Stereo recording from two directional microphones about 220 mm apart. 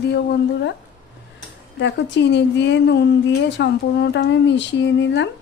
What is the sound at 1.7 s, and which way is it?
A woman's voice, 55° left (ahead or behind).